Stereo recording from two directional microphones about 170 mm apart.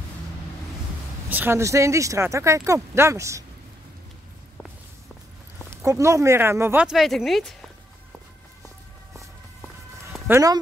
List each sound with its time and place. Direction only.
1.3 s speech: 15° right (ahead or behind)
5.7 s speech: 15° right (ahead or behind); by 7.5 s centre (ahead or behind)
10.2 s speech: 15° right (ahead or behind)